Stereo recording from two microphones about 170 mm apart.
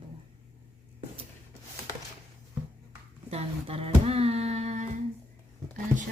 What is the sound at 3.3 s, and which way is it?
Speech, 35° right (ahead or behind).